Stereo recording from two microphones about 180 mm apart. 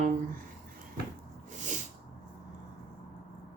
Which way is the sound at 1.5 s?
45° right (ahead or behind).